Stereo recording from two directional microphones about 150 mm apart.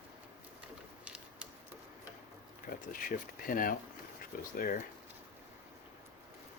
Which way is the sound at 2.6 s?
75° left (ahead or behind).